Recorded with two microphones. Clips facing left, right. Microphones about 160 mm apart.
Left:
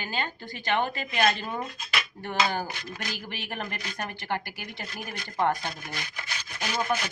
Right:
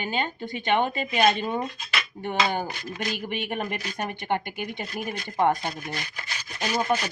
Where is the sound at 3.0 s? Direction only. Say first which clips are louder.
Right 8 dB; 20° right (ahead or behind).